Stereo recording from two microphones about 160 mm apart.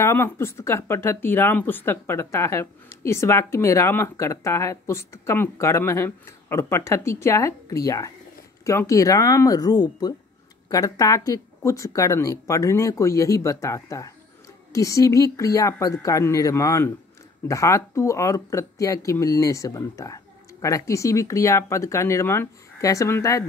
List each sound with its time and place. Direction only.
0.0 s speech: 15° left (ahead or behind)